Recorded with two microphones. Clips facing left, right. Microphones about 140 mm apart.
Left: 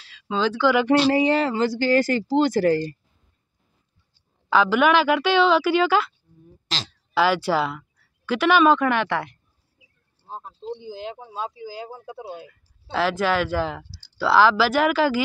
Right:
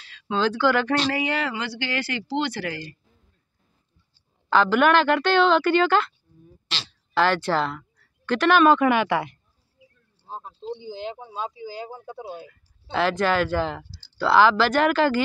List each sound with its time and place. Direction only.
0.0 s speech: centre (ahead or behind)
1.1 s speech: 35° left (ahead or behind)
4.5 s speech: 5° left (ahead or behind)
7.2 s speech: 5° left (ahead or behind)